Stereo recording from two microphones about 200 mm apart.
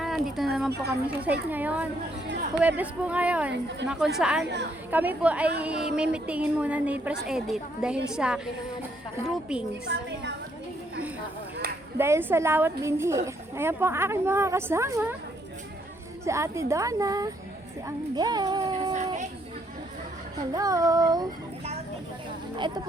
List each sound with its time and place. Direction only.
0.0 s a sound: centre (ahead or behind)
1.0 s a woman's voice: 5° right (ahead or behind)
9.9 s a woman's voice: 60° right (ahead or behind)
11.9 s a woman's voice: 10° right (ahead or behind)
16.2 s a woman's voice: 15° right (ahead or behind)
20.5 s a woman's voice: 15° right (ahead or behind)
22.5 s speech: 20° right (ahead or behind)